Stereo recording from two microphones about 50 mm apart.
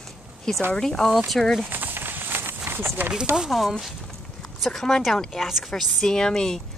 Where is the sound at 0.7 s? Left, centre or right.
Centre.